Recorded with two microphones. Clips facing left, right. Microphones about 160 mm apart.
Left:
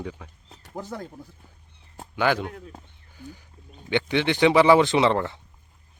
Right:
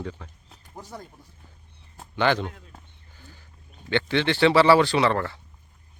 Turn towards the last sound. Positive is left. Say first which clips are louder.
# left 2 dB
turn(degrees=20)  # may be behind; listen again after turning